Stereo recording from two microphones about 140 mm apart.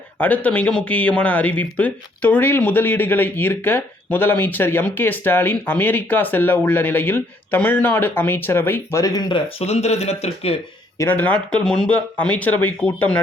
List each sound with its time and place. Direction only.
0.2 s speech: 10° left (ahead or behind); by 9.4 s 30° left (ahead or behind)
9.6 s speech: 50° left (ahead or behind)
10.9 s speech: 15° left (ahead or behind)